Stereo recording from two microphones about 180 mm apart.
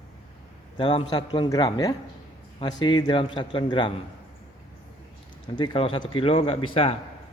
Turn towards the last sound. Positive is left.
turn(degrees=30)  # may be behind; listen again after turning